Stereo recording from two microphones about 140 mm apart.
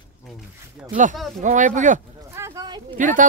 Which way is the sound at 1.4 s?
65° right (ahead or behind).